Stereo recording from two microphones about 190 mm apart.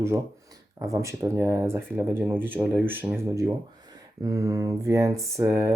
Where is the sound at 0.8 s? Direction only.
15° right (ahead or behind).